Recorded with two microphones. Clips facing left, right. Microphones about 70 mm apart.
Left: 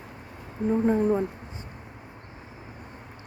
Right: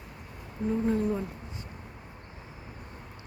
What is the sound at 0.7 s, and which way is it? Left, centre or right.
Speech, left.